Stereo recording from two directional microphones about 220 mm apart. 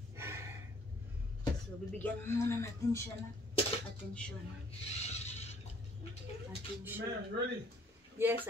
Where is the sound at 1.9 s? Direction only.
10° left (ahead or behind).